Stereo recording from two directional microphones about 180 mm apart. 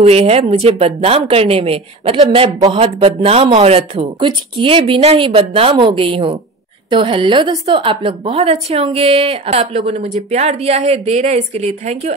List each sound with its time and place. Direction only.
0.0 s a woman's voice: 35° right (ahead or behind)